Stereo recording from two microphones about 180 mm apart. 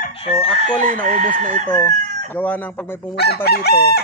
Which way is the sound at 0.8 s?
45° right (ahead or behind).